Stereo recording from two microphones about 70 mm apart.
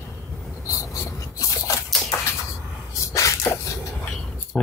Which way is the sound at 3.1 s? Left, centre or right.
Left.